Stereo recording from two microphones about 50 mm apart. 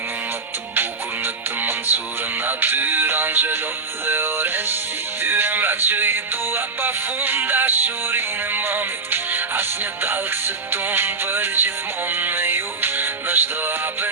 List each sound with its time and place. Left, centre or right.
0.8 s music: right